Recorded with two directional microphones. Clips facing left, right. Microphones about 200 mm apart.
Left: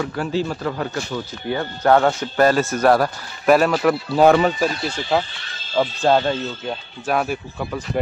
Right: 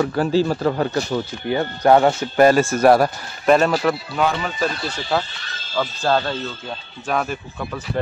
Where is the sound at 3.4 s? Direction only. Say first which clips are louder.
Left 1 dB; 5° left (ahead or behind).